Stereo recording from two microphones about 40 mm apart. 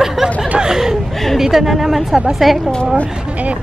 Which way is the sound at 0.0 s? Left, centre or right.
Centre.